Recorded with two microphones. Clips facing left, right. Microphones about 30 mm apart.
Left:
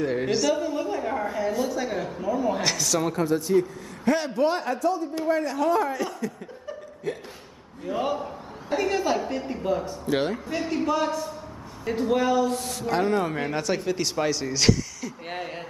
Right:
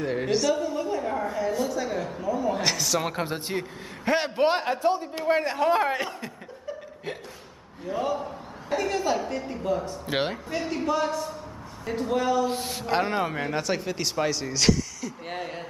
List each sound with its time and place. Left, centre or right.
0.0 s a woman's voice: centre
2.6 s a woman's voice: centre
3.0 s a man's voice: right
7.1 s a man's voice: right
7.8 s a woman's voice: centre
10.0 s a sound: right
10.6 s a woman's voice: centre
12.4 s a sound: right
13.4 s a woman's voice: centre